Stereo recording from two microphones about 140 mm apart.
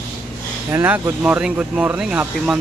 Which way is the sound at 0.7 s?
15° right (ahead or behind).